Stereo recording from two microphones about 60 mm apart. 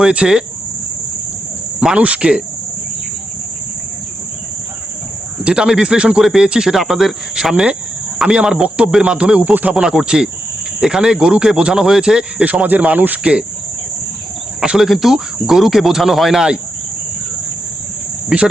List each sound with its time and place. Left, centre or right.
0.0 s speech: centre
2.0 s speech: centre
5.4 s speech: centre
9.8 s speech: centre
12.5 s speech: right
14.6 s cricket: centre
14.8 s speech: centre
18.3 s speech: centre